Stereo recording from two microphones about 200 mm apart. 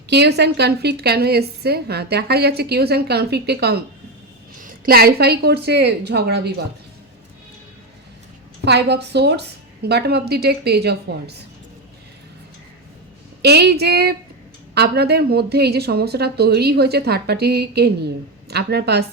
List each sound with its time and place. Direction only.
0.1 s a woman's voice: 55° right (ahead or behind)
8.6 s a woman's voice: 55° right (ahead or behind)
13.4 s a woman's voice: 55° right (ahead or behind)